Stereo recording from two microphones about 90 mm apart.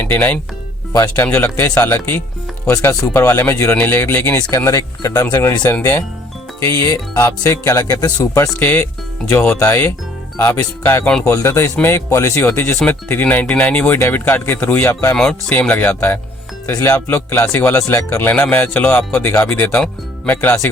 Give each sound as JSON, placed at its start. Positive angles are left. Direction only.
{"t": 0.0, "sound": "speech", "side_deg": 20}
{"t": 1.4, "sound": "speech", "side_deg": 25}
{"t": 3.8, "sound": "speech", "side_deg": 25}
{"t": 4.5, "sound": "speech", "side_deg": 35}
{"t": 8.5, "sound": "speech", "side_deg": 20}
{"t": 11.0, "sound": "speech", "side_deg": 10}
{"t": 11.3, "sound": "speech", "side_deg": 30}
{"t": 15.1, "sound": "speech", "side_deg": 10}
{"t": 15.7, "sound": "speech", "side_deg": 20}